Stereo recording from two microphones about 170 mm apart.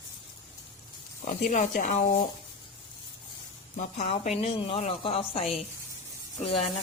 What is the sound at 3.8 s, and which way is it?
Speech, 40° left (ahead or behind).